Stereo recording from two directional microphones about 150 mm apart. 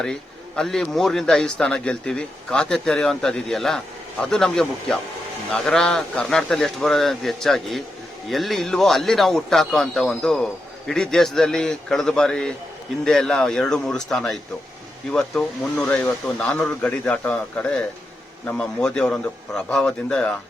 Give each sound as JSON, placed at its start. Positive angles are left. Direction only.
{"t": 0.0, "sound": "speech", "side_deg": 5}